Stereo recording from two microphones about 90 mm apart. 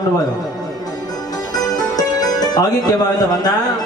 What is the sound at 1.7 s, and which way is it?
Music, 45° left (ahead or behind).